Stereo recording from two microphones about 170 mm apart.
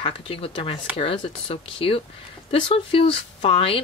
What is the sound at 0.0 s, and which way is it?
Speech, 35° left (ahead or behind).